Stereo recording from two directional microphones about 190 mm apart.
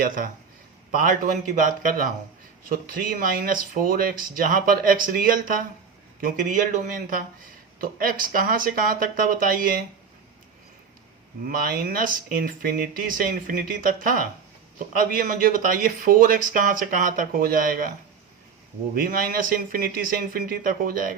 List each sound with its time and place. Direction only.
0.9 s speech: 45° right (ahead or behind)
11.4 s speech: 50° right (ahead or behind)
18.9 s speech: 50° right (ahead or behind)